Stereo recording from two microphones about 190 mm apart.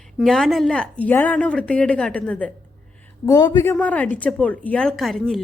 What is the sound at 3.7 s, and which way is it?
A woman's voice, 5° left (ahead or behind).